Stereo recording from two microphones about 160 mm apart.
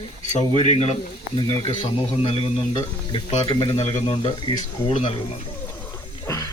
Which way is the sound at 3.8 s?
40° left (ahead or behind).